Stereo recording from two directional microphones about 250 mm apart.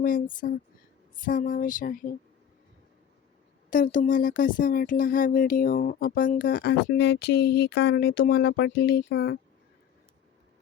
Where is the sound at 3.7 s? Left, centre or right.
Left.